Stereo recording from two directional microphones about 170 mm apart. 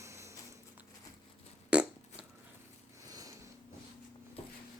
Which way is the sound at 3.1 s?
20° right (ahead or behind).